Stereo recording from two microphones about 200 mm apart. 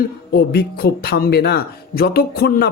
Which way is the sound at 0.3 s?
50° left (ahead or behind).